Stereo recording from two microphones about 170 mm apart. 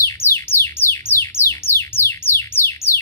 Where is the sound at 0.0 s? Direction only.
15° left (ahead or behind).